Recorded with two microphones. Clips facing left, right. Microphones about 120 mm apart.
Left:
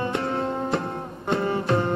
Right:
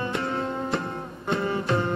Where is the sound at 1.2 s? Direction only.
40° left (ahead or behind).